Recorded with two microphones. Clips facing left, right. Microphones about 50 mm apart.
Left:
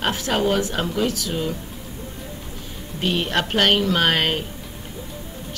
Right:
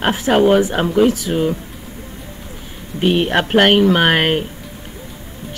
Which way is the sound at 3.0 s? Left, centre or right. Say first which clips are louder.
Right 7 dB; right.